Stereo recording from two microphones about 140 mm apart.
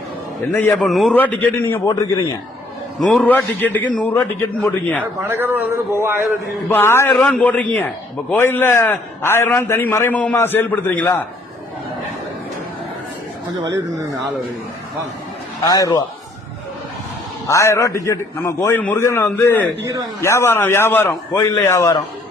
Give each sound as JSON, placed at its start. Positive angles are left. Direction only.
{"t": 0.7, "sound": "a man's voice", "side_deg": 0}
{"t": 1.1, "sound": "a man's voice", "side_deg": 10}
{"t": 1.9, "sound": "a man's voice", "side_deg": 25}
{"t": 3.0, "sound": "a man's voice", "side_deg": 5}
{"t": 5.4, "sound": "a man's voice", "side_deg": -15}
{"t": 6.7, "sound": "a man's voice", "side_deg": 15}
{"t": 13.6, "sound": "speech", "side_deg": -25}
{"t": 15.6, "sound": "a man's voice", "side_deg": 25}
{"t": 17.5, "sound": "a man's voice", "side_deg": 20}
{"t": 19.8, "sound": "speech", "side_deg": -25}
{"t": 20.2, "sound": "a man's voice", "side_deg": 20}